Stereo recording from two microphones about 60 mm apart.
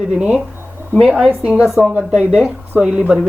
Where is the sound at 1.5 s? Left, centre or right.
Centre.